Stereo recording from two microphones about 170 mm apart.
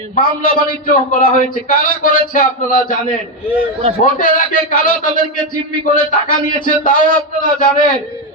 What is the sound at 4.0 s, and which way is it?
A man's voice, 50° left (ahead or behind).